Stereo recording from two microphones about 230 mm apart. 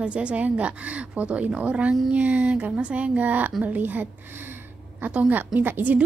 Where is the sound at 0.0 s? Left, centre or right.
Centre.